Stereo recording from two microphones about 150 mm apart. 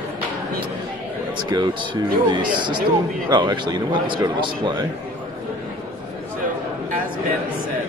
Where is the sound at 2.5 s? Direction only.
30° right (ahead or behind).